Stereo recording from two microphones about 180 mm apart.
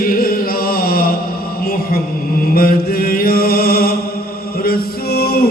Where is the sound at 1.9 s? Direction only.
55° left (ahead or behind).